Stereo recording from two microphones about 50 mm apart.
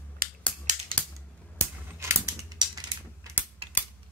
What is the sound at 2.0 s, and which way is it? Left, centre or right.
Mechanisms, right.